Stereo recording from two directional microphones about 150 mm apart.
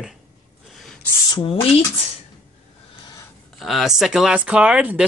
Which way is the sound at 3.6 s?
Centre (ahead or behind).